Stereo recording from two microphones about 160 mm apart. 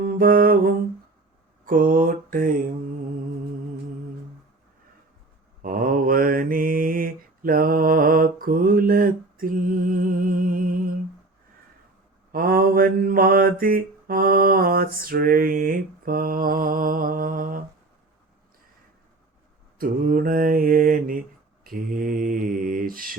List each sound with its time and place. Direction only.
0.0 s mantra: 60° right (ahead or behind)
5.6 s mantra: 60° right (ahead or behind)
12.3 s mantra: 65° right (ahead or behind)
19.8 s mantra: 60° right (ahead or behind)